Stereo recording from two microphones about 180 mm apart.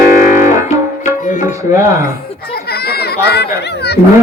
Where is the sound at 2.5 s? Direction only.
60° left (ahead or behind).